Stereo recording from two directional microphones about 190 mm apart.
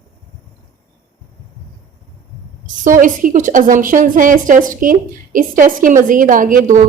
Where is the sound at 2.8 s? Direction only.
45° right (ahead or behind).